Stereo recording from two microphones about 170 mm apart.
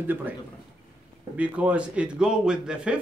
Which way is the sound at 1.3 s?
5° right (ahead or behind).